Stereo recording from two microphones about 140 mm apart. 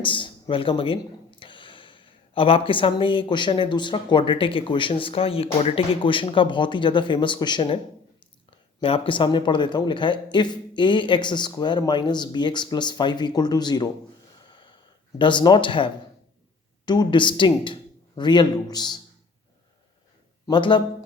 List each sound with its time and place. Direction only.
0.0 s speech: 35° left (ahead or behind)
14.5 s a sound: 35° left (ahead or behind)
15.2 s a man's voice: 35° left (ahead or behind)
20.5 s speech: 35° left (ahead or behind)